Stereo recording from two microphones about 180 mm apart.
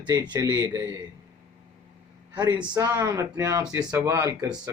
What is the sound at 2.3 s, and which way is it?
Speech, 25° right (ahead or behind).